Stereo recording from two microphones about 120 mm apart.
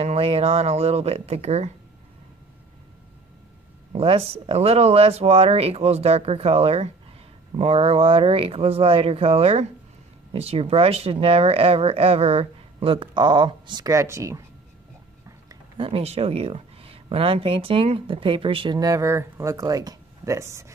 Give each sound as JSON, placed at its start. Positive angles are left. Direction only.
{"t": 0.0, "sound": "speech", "side_deg": -55}
{"t": 3.9, "sound": "speech", "side_deg": -55}
{"t": 13.9, "sound": "speech", "side_deg": -25}
{"t": 15.8, "sound": "speech", "side_deg": -55}
{"t": 18.8, "sound": "speech", "side_deg": -30}